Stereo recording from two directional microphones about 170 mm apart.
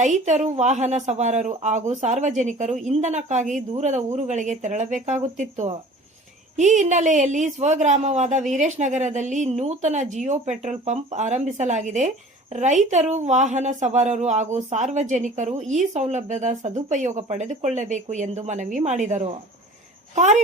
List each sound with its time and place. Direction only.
0.0 s speech: 45° right (ahead or behind)